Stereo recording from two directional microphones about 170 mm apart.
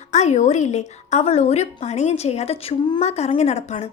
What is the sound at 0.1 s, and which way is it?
A woman's voice, 45° left (ahead or behind).